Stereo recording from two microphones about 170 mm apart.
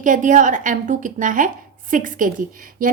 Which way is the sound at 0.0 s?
50° right (ahead or behind).